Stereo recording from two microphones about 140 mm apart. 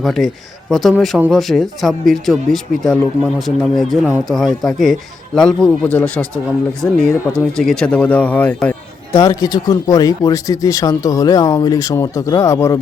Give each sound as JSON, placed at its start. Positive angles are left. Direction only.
{"t": 0.0, "sound": "speech", "side_deg": 0}
{"t": 7.3, "sound": "speech", "side_deg": 5}
{"t": 9.1, "sound": "speech", "side_deg": 25}